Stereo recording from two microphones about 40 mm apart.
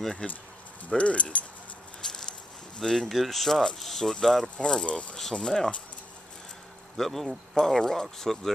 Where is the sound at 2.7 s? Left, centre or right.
Centre.